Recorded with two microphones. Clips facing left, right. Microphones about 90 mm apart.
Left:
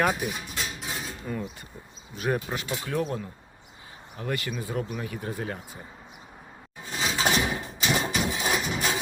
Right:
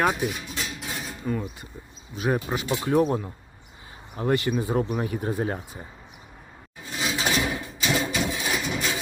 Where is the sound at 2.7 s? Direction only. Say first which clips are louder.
Right 8 dB; 25° right (ahead or behind).